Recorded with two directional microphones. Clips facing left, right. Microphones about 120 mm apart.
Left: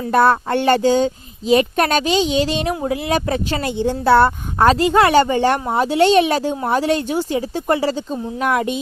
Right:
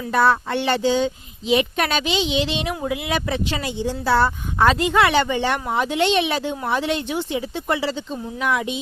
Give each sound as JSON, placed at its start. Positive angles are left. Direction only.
{"t": 0.1, "sound": "speech", "side_deg": 50}
{"t": 4.6, "sound": "speech", "side_deg": 35}